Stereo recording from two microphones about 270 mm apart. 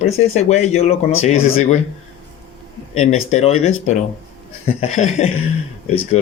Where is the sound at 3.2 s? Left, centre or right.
Left.